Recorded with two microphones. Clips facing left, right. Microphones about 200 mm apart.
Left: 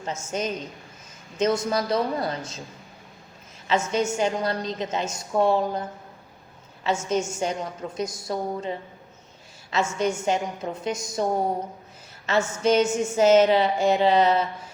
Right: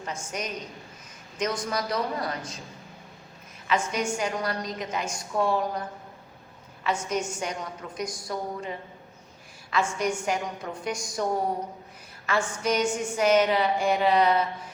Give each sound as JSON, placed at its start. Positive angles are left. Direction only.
{"t": 0.0, "sound": "a woman's voice", "side_deg": 25}
{"t": 3.7, "sound": "a woman's voice", "side_deg": 25}
{"t": 7.1, "sound": "a woman's voice", "side_deg": 25}